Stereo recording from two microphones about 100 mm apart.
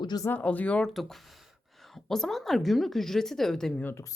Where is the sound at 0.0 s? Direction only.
45° left (ahead or behind).